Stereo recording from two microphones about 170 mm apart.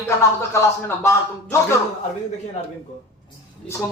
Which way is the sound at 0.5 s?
15° left (ahead or behind).